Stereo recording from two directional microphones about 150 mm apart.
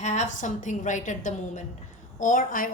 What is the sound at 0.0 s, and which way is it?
Speech, 50° left (ahead or behind).